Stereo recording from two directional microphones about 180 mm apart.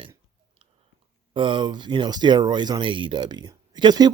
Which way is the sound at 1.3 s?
25° right (ahead or behind).